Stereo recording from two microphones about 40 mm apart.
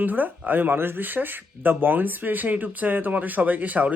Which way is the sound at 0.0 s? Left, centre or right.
Right.